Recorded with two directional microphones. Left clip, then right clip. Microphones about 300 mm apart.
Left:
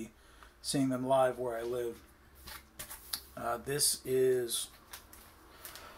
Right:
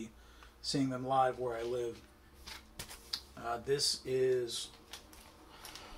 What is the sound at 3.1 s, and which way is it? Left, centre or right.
Speech, centre.